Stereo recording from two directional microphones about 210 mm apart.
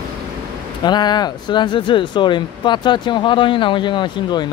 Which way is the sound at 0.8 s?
20° left (ahead or behind).